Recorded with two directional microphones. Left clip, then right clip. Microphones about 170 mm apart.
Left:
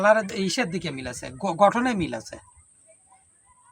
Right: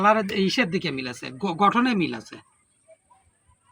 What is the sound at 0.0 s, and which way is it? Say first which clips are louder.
Speech: even; 20° left (ahead or behind).